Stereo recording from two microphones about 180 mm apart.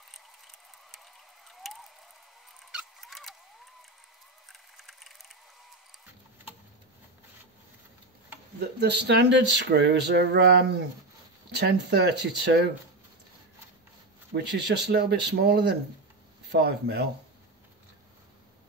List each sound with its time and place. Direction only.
0.1 s a sound: centre (ahead or behind)
4.5 s mechanisms: centre (ahead or behind)
8.7 s speech: 70° right (ahead or behind)
14.3 s speech: 65° right (ahead or behind)